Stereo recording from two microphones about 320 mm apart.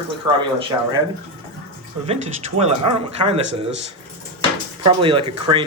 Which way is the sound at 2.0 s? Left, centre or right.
Centre.